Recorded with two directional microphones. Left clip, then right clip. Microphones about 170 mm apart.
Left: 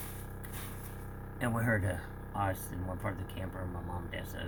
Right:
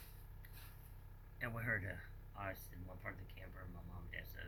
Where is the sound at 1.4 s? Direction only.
20° left (ahead or behind).